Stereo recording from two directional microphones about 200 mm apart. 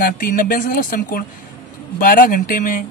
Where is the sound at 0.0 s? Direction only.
45° left (ahead or behind).